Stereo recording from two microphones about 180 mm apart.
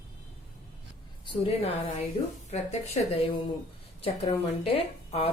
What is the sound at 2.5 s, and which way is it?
A woman's voice, 35° left (ahead or behind).